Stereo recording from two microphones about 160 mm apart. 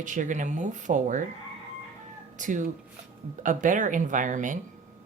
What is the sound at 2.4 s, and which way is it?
A woman's voice, 55° right (ahead or behind).